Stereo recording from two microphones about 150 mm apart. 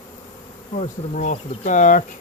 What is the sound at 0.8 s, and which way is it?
Speech, 50° left (ahead or behind).